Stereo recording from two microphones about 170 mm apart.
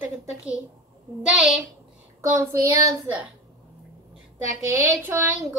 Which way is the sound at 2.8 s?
15° right (ahead or behind).